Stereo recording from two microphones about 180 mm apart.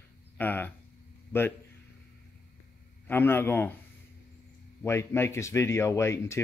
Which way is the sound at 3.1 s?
10° left (ahead or behind).